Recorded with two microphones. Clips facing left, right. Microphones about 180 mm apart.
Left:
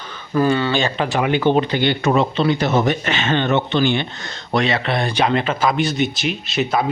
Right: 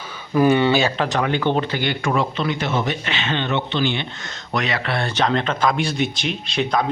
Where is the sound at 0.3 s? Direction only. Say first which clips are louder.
Right 2 dB; 15° right (ahead or behind).